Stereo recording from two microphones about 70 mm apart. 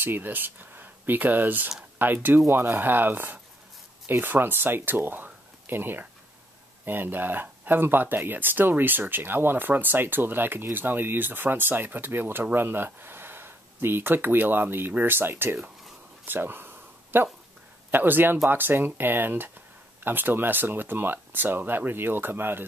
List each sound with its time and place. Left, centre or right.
0.0 s speech: right
16.3 s a sound: right
17.9 s speech: right